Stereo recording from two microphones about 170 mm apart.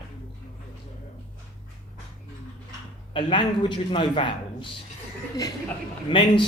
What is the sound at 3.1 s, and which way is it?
A man's voice, 30° left (ahead or behind).